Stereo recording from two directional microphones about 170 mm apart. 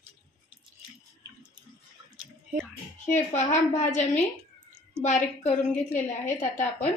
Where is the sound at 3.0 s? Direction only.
45° left (ahead or behind).